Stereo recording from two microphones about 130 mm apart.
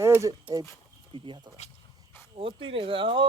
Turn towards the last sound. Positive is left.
turn(degrees=-40)  # may be behind; listen again after turning